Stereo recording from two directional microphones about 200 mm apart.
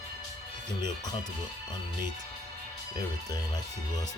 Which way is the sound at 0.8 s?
20° left (ahead or behind).